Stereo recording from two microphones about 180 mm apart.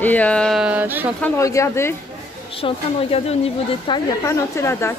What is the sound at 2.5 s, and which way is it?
Speech, 35° left (ahead or behind).